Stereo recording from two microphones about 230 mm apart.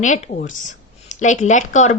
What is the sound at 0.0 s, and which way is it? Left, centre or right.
A woman's voice, left.